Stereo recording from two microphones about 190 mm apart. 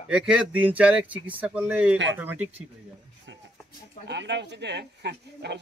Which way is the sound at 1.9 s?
80° right.